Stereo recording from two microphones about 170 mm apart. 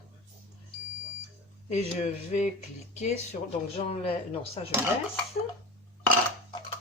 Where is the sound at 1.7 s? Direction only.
45° left (ahead or behind).